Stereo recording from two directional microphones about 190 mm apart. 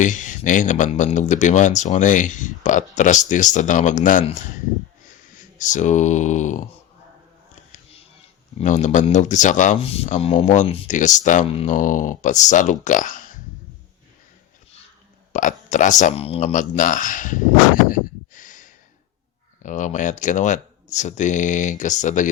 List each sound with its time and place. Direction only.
0.0 s speech: 40° left (ahead or behind)
5.5 s speech: 40° left (ahead or behind)
8.5 s speech: 40° left (ahead or behind)
15.3 s speech: 40° left (ahead or behind)
17.8 s a sound: 45° left (ahead or behind)
19.6 s speech: 40° left (ahead or behind)